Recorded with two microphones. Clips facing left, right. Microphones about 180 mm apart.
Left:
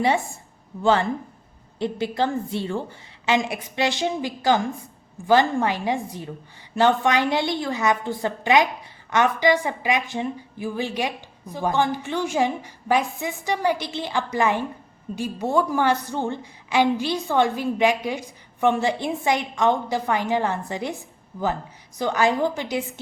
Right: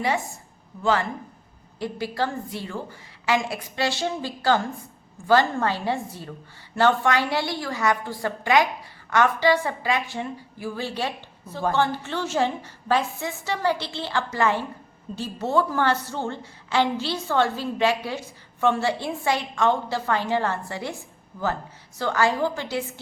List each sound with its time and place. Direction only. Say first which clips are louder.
0.8 s a woman's voice: left 3 dB; 30° left (ahead or behind)